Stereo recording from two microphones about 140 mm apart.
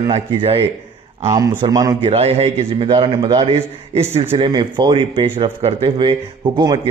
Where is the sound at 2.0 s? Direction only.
45° right (ahead or behind).